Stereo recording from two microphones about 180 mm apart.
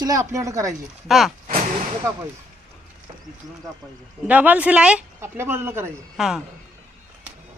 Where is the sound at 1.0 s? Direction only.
Centre (ahead or behind).